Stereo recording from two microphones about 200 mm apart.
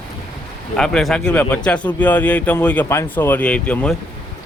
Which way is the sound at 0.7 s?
5° left (ahead or behind).